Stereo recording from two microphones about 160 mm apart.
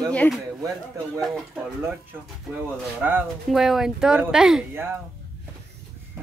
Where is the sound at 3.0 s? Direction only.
10° right (ahead or behind).